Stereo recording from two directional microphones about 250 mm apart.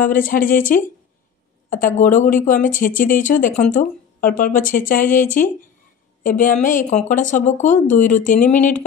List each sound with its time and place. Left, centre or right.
0.0 s speech: left
2.0 s speech: left